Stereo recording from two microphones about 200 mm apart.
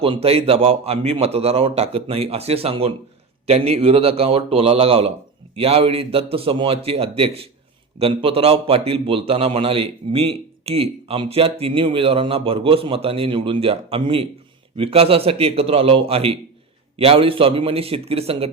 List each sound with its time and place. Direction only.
0.0 s a man's voice: 30° right (ahead or behind)